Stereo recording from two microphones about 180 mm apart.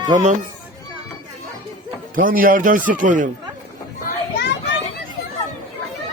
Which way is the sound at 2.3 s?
50° right (ahead or behind).